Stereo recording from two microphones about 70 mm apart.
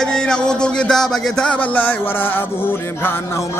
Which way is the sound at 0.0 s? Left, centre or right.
Centre.